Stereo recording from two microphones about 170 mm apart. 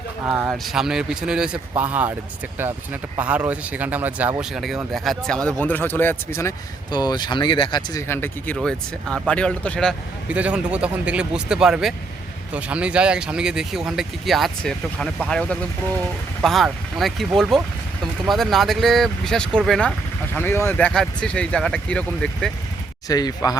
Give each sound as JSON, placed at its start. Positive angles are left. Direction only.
{"t": 0.3, "sound": "speech", "side_deg": -5}
{"t": 6.9, "sound": "speech", "side_deg": 25}
{"t": 8.0, "sound": "speech", "side_deg": 15}
{"t": 8.5, "sound": "speech", "side_deg": 0}
{"t": 10.2, "sound": "speech", "side_deg": -5}
{"t": 23.0, "sound": "speech", "side_deg": 20}